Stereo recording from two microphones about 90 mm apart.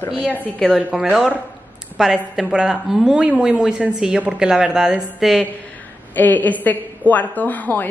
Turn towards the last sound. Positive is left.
turn(degrees=20)  # may be behind; listen again after turning